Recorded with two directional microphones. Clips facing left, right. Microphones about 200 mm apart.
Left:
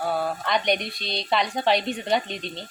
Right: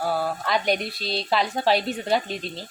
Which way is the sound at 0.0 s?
5° right (ahead or behind).